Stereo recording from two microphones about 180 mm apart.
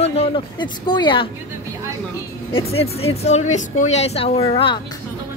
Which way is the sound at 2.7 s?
35° left (ahead or behind).